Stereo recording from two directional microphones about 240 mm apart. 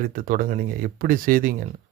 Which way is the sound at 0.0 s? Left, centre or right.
Right.